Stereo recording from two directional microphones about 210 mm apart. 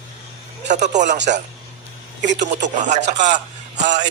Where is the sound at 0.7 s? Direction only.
35° right (ahead or behind).